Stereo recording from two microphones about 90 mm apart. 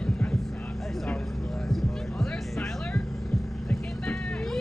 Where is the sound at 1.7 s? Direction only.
5° left (ahead or behind).